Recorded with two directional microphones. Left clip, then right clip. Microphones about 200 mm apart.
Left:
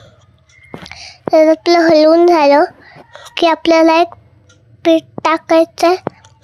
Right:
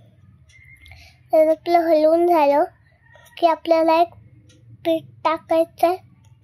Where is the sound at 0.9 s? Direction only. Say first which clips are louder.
Left 7 dB; 20° left (ahead or behind).